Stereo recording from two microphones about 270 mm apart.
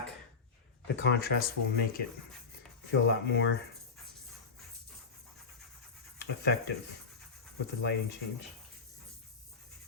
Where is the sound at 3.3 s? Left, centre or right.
Left.